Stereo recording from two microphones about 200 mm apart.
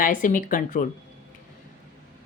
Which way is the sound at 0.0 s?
40° left (ahead or behind).